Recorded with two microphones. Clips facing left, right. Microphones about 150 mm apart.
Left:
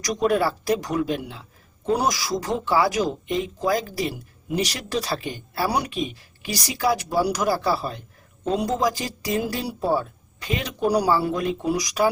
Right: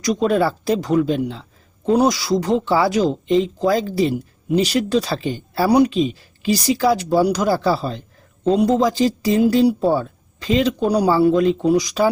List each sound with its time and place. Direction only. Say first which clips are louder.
0.0 s speech: right 4 dB; 25° right (ahead or behind)